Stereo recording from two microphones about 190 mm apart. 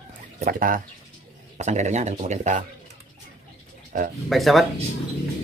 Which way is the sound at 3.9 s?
45° right (ahead or behind).